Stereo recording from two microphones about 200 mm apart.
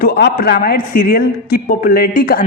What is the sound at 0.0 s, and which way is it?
Speech, 50° left (ahead or behind).